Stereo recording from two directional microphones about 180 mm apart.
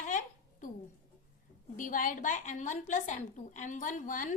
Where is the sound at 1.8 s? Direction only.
50° left (ahead or behind).